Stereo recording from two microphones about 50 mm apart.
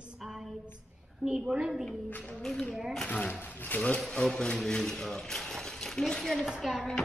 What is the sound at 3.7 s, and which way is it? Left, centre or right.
Speech, left.